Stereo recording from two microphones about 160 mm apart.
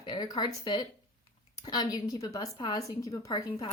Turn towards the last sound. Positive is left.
turn(degrees=35)  # may be behind; listen again after turning